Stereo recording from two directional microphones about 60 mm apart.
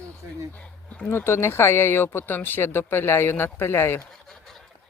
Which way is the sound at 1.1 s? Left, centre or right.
Left.